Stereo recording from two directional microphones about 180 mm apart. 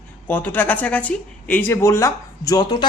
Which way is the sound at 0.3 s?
10° left (ahead or behind).